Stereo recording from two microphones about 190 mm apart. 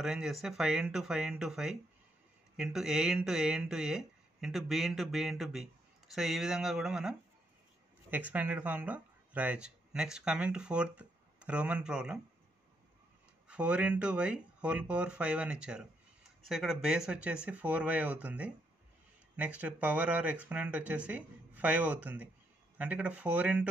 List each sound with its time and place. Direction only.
0.0 s speech: centre (ahead or behind)
13.5 s speech: 5° right (ahead or behind)